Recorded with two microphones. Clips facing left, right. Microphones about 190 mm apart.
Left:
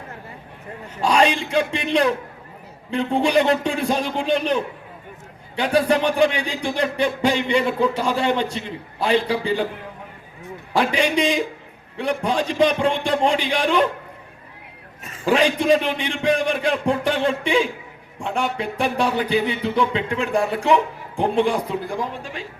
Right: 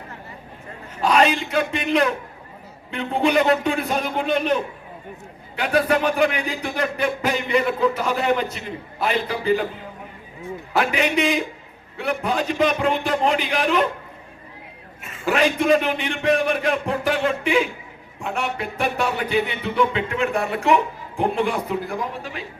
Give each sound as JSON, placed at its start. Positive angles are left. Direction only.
{"t": 1.0, "sound": "speech", "side_deg": 30}
{"t": 5.5, "sound": "speech", "side_deg": 30}
{"t": 10.8, "sound": "speech", "side_deg": 30}
{"t": 15.0, "sound": "speech", "side_deg": 30}